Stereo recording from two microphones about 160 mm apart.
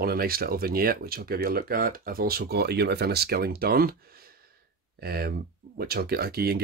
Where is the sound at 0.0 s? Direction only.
70° right (ahead or behind).